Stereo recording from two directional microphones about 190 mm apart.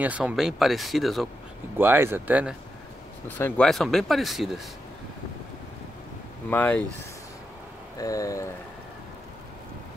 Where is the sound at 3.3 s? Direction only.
10° left (ahead or behind).